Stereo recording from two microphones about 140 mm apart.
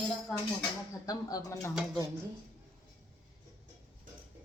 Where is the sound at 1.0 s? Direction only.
25° left (ahead or behind).